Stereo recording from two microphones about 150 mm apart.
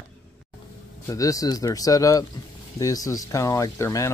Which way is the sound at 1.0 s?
20° left (ahead or behind).